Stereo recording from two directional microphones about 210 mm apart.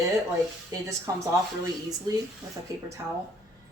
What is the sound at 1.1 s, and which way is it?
Speech, 15° right (ahead or behind).